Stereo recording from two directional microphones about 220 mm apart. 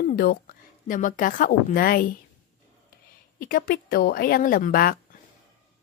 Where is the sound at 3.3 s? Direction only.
40° left (ahead or behind).